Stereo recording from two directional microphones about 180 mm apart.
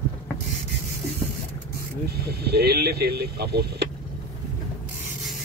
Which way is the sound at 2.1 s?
65° right (ahead or behind).